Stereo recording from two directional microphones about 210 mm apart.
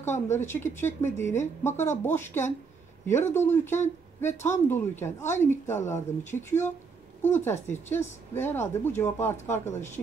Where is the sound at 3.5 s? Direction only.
10° left (ahead or behind).